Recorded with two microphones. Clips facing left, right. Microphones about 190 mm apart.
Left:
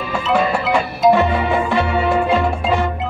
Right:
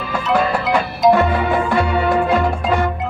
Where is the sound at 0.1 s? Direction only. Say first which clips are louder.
Even; centre (ahead or behind).